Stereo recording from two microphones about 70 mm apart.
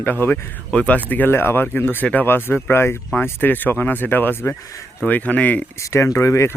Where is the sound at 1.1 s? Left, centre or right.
Left.